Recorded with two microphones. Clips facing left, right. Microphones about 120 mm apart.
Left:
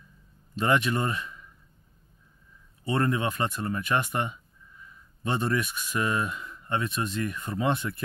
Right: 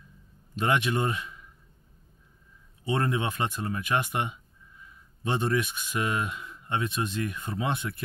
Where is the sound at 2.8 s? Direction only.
20° right (ahead or behind).